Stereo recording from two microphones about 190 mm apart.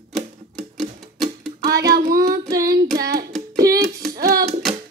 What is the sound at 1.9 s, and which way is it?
Child singing, 50° right (ahead or behind).